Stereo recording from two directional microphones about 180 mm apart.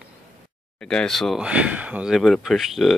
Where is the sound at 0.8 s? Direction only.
5° left (ahead or behind).